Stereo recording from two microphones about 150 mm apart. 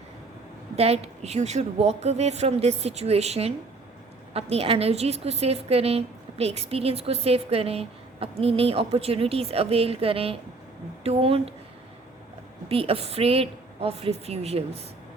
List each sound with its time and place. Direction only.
0.8 s a woman's voice: 45° right (ahead or behind)
12.6 s a woman's voice: 40° right (ahead or behind)